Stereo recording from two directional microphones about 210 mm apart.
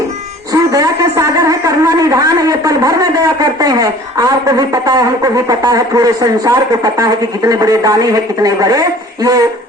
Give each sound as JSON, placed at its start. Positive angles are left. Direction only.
{"t": 0.5, "sound": "a man's voice", "side_deg": -15}